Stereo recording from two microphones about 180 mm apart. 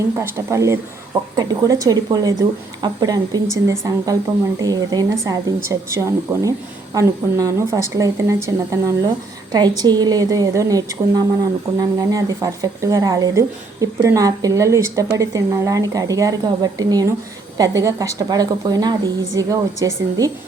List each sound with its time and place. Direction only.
0.2 s a woman's voice: 15° right (ahead or behind)